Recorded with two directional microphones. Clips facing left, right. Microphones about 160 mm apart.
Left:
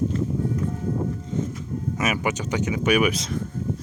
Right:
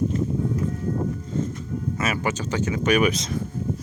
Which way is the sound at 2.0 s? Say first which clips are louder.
Left 1 dB; 15° left (ahead or behind).